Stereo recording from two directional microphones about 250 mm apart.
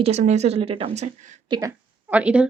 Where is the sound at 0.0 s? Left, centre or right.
Right.